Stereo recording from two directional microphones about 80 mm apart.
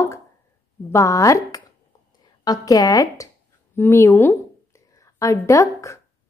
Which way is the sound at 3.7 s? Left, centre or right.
Left.